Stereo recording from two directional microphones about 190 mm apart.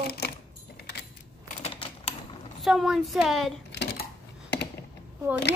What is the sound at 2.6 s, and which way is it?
Speech, centre (ahead or behind).